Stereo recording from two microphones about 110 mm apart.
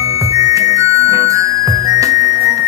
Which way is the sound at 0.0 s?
30° right (ahead or behind).